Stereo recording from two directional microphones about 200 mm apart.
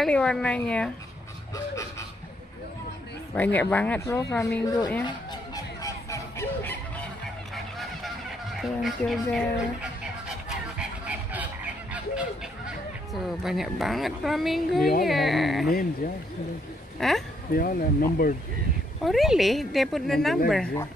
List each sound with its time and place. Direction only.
0.0 s a woman's voice: 5° left (ahead or behind)
3.3 s speech: 10° left (ahead or behind)
5.0 s fowl: 20° left (ahead or behind)
7.5 s honk: centre (ahead or behind)
8.5 s speech: centre (ahead or behind)
10.8 s honk: 5° right (ahead or behind)
13.1 s a woman's voice: centre (ahead or behind)
17.0 s a woman's voice: centre (ahead or behind)
17.5 s speech: 45° left (ahead or behind)
19.0 s a woman's voice: centre (ahead or behind)